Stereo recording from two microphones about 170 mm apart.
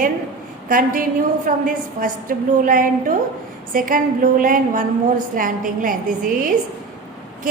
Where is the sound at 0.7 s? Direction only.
55° right (ahead or behind).